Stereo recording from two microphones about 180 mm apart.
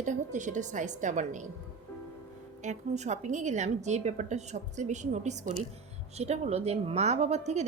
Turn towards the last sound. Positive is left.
turn(degrees=-40)  # may be behind; listen again after turning